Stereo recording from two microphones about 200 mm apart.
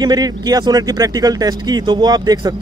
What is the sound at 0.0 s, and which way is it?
Speech, 20° right (ahead or behind).